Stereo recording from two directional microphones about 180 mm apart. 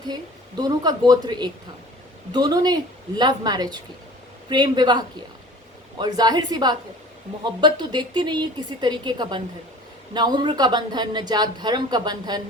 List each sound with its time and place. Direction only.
0.1 s speech: 20° right (ahead or behind)